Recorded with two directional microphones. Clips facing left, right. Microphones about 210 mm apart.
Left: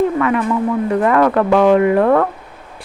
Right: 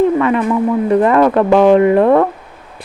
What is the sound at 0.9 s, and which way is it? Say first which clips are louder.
Speech: right 3 dB; 25° right (ahead or behind).